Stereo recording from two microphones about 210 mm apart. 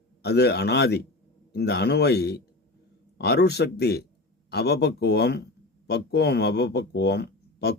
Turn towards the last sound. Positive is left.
turn(degrees=50)  # may be behind; listen again after turning